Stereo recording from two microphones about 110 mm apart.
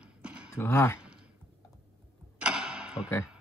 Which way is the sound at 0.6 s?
25° left (ahead or behind).